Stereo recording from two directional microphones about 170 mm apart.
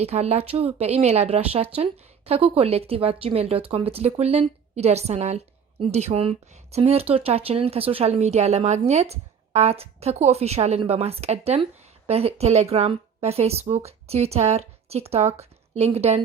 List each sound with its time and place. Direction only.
0.0 s speech: 40° right (ahead or behind)